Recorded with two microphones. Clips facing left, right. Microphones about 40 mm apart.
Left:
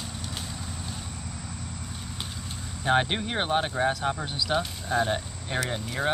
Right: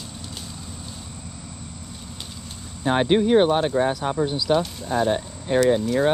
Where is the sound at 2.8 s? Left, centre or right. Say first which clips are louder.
Right 5 dB; centre.